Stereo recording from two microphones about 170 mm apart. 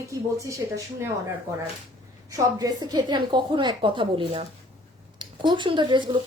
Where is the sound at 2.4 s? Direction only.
20° right (ahead or behind).